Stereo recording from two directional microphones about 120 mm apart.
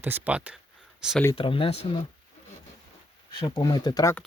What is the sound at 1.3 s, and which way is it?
Speech, 45° left (ahead or behind).